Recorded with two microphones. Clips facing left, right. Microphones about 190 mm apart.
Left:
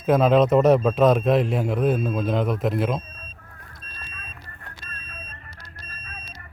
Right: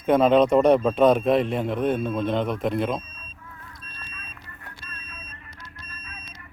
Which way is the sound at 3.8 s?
35° left (ahead or behind).